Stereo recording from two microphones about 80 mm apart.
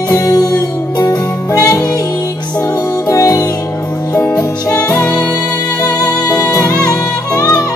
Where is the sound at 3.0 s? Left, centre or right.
Left.